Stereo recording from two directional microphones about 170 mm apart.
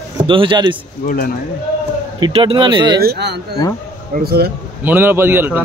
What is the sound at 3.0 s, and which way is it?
Speech, 75° right (ahead or behind).